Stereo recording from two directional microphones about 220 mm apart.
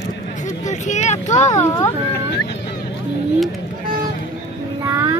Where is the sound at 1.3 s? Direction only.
15° left (ahead or behind).